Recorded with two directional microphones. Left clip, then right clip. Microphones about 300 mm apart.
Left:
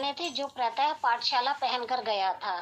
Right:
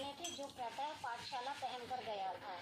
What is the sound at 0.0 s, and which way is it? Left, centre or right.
Speech, left.